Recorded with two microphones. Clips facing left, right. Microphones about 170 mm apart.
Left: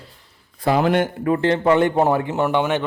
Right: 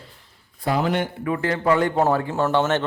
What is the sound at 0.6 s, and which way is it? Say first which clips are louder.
Speech: left 5 dB; 70° left (ahead or behind).